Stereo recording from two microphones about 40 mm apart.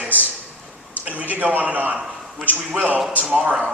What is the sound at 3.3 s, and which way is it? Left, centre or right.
Speech, right.